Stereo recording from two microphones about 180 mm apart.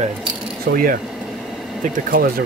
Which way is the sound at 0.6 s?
50° right (ahead or behind).